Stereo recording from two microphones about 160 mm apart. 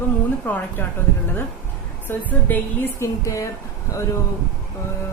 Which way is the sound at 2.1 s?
10° left (ahead or behind).